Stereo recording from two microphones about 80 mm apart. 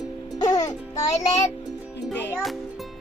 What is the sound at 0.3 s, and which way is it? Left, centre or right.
Music, left.